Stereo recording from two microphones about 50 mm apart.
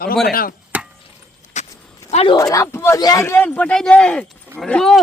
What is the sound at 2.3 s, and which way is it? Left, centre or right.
Speech, left.